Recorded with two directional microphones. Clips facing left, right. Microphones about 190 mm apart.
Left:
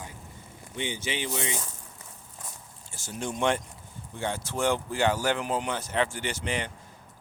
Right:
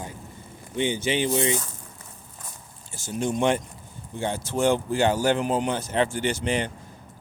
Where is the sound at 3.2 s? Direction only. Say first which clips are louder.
Right 4 dB; 20° right (ahead or behind).